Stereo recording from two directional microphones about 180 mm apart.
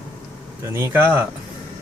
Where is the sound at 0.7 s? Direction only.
15° right (ahead or behind).